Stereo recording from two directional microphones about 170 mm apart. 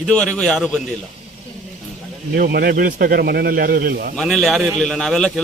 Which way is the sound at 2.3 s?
65° right (ahead or behind).